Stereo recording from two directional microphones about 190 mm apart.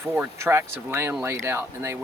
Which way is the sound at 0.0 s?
15° right (ahead or behind).